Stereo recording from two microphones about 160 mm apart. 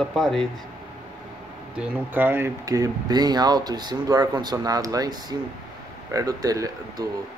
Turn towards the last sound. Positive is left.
turn(degrees=-25)  # may be behind; listen again after turning